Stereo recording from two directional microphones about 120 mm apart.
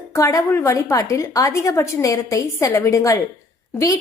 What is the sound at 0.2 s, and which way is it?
A woman's voice, 25° left (ahead or behind).